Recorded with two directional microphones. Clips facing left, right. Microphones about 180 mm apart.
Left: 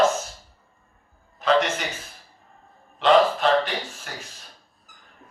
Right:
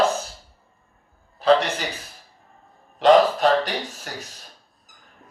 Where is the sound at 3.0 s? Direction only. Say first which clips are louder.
Right 3 dB; 40° right (ahead or behind).